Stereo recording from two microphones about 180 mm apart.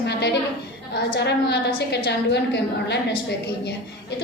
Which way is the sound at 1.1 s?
70° left (ahead or behind).